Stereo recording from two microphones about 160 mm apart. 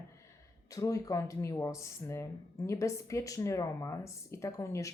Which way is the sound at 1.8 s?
20° left (ahead or behind).